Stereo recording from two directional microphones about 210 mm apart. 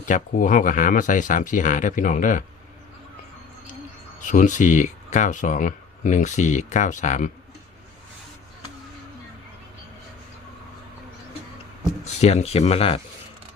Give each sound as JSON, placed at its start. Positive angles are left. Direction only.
{"t": 0.0, "sound": "speech", "side_deg": 40}
{"t": 4.2, "sound": "speech", "side_deg": 40}
{"t": 12.0, "sound": "speech", "side_deg": 30}